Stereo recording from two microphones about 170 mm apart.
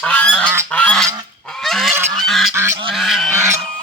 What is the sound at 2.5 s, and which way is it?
Goose, 15° right (ahead or behind).